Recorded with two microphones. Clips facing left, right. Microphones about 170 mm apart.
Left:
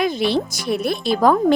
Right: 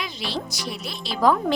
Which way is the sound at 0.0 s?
55° left (ahead or behind).